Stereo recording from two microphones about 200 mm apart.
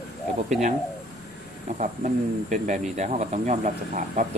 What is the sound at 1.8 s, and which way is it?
Speech, 40° right (ahead or behind).